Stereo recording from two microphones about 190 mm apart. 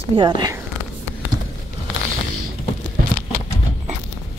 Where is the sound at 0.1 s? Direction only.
25° right (ahead or behind).